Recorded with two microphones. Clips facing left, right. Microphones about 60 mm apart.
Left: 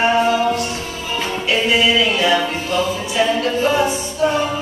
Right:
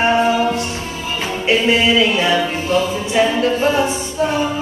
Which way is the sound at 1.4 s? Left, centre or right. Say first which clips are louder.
Right 2 dB; right.